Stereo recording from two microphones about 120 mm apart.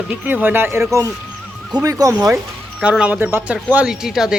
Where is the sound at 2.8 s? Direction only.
10° right (ahead or behind).